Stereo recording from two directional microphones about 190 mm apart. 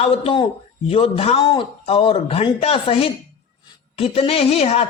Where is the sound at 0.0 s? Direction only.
30° left (ahead or behind).